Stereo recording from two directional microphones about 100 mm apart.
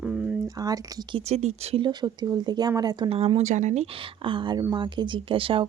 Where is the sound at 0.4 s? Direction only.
35° right (ahead or behind).